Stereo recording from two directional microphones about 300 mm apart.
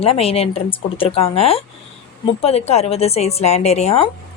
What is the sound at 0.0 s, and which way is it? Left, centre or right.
A woman's voice, centre.